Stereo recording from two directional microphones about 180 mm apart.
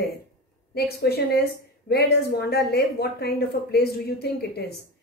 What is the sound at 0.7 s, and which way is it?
A woman's voice, 60° left (ahead or behind).